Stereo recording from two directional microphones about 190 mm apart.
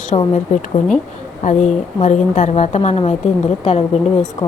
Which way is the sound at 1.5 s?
40° left (ahead or behind).